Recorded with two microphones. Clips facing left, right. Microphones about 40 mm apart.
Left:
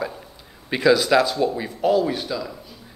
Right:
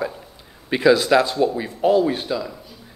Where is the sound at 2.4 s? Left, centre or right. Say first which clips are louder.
Right 1 dB; centre.